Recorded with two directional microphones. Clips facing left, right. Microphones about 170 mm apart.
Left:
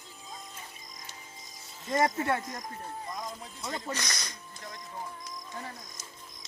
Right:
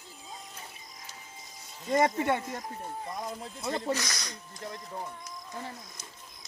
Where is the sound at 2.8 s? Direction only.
30° right (ahead or behind).